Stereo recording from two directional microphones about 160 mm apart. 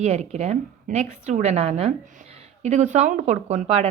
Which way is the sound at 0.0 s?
45° right (ahead or behind).